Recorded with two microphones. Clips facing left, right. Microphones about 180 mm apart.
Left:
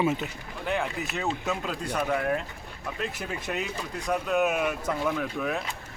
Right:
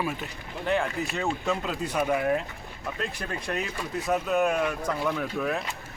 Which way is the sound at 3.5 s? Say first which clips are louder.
Right 2 dB; centre (ahead or behind).